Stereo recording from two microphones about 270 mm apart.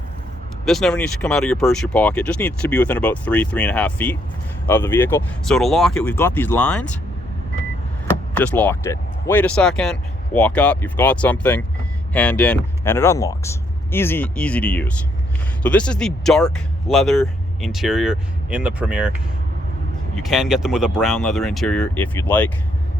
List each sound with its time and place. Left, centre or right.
0.6 s speech: centre
8.4 s speech: centre
20.1 s speech: centre